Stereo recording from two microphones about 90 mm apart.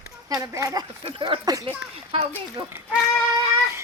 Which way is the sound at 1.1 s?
80° right.